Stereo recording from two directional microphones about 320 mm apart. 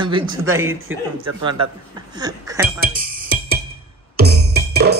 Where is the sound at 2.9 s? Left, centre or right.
Right.